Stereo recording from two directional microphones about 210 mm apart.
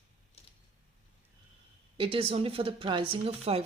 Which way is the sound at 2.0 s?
25° right (ahead or behind).